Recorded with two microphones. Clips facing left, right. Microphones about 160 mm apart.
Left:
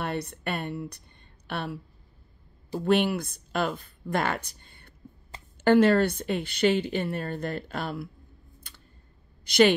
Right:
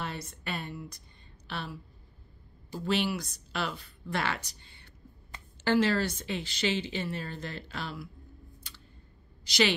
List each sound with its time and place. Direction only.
0.0 s a woman's voice: 60° left (ahead or behind)
2.8 s a woman's voice: 55° left (ahead or behind)
8.6 s a sound: 50° left (ahead or behind)
9.4 s a woman's voice: 55° left (ahead or behind)